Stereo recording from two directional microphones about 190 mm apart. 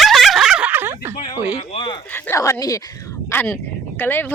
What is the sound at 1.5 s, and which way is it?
Speech, 25° left (ahead or behind).